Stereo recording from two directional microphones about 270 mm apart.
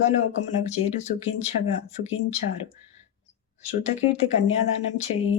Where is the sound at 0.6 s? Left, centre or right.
Left.